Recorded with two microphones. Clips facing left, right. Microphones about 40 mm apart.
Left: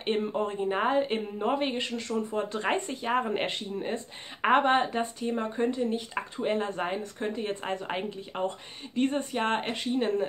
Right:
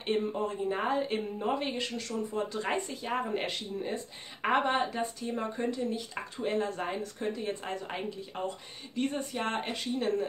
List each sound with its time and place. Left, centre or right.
0.0 s speech: left